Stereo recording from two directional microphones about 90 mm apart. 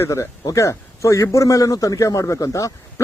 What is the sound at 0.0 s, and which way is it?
A man's voice, 35° left (ahead or behind).